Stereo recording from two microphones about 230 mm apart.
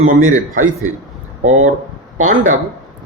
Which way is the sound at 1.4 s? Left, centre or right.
Right.